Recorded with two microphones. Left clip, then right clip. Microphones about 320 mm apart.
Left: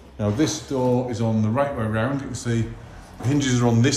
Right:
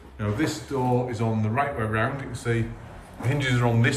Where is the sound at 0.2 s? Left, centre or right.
Centre.